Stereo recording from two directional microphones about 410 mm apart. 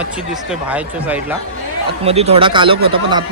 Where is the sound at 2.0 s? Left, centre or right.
Centre.